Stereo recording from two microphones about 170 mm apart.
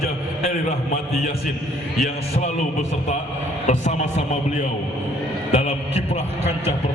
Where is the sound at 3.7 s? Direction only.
45° left (ahead or behind).